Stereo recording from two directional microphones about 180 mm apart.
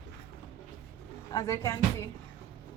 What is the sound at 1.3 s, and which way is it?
Speech, 20° left (ahead or behind).